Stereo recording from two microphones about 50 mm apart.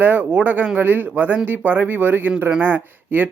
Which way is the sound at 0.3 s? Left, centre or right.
Right.